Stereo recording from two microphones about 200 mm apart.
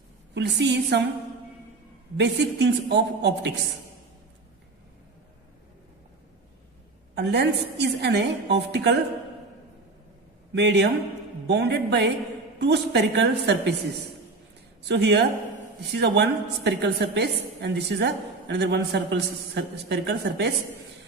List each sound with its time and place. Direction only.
0.3 s a woman's voice: 60° right (ahead or behind)
2.1 s a woman's voice: 60° right (ahead or behind)
7.2 s a woman's voice: 55° right (ahead or behind)
10.5 s a woman's voice: 60° right (ahead or behind)
14.9 s a woman's voice: 60° right (ahead or behind)